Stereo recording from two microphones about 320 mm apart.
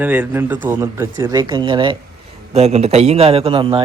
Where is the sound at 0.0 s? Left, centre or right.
Centre.